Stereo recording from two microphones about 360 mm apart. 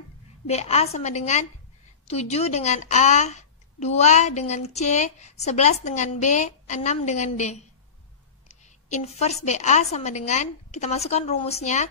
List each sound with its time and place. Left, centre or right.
0.5 s a woman's voice: centre